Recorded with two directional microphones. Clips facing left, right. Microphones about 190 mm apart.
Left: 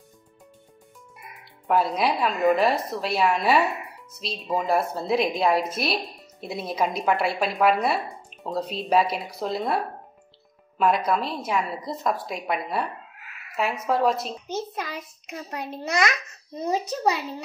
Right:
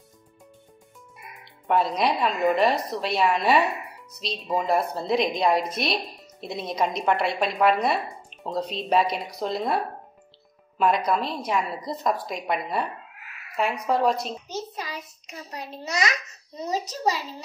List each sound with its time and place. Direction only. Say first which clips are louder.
1.4 s speech: even; centre (ahead or behind)
14.5 s a child's voice: left 3 dB; 55° left (ahead or behind)